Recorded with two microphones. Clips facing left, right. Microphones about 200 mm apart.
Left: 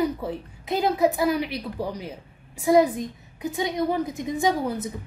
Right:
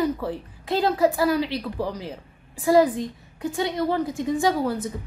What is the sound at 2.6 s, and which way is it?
A woman's voice, 20° left (ahead or behind).